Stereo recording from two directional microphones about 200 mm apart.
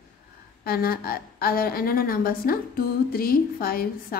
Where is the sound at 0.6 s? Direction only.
50° left (ahead or behind).